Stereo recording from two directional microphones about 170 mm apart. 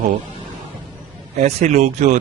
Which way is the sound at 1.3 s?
45° right (ahead or behind).